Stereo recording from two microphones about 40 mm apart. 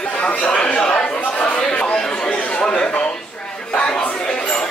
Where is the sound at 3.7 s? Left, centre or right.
Left.